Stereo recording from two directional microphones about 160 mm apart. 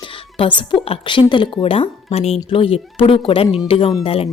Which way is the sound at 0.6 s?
30° left (ahead or behind).